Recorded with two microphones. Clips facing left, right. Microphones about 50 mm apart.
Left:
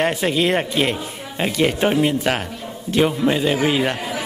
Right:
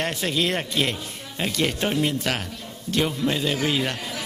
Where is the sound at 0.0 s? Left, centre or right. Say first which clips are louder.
Left 6 dB; centre.